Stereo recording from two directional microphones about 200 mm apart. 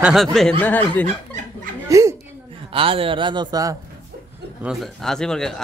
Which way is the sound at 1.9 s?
15° right (ahead or behind).